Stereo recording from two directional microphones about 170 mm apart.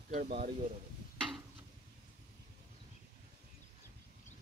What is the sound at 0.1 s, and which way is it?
Speech, 50° right (ahead or behind).